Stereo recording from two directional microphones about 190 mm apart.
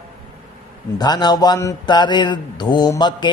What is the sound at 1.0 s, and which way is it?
A man's voice, 20° left (ahead or behind).